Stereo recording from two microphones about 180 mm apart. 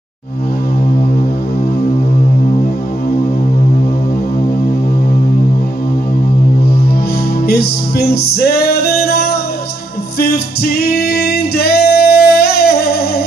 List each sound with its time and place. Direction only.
7.4 s music: 60° left (ahead or behind)